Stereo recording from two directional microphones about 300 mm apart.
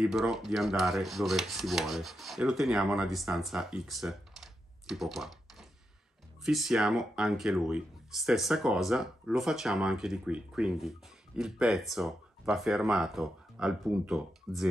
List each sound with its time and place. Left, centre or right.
0.0 s speech: centre